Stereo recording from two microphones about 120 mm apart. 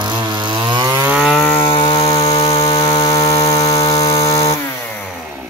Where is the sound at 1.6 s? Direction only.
45° left (ahead or behind).